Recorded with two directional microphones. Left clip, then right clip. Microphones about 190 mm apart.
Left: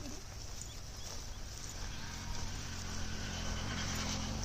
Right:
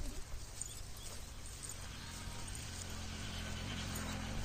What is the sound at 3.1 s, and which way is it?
Vehicle, 35° left (ahead or behind).